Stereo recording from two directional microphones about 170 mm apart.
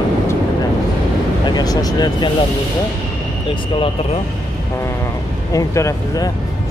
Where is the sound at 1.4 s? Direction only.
25° left (ahead or behind).